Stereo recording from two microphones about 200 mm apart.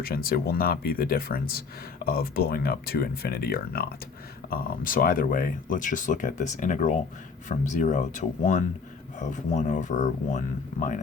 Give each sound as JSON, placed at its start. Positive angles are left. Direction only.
{"t": 0.0, "sound": "speech", "side_deg": 50}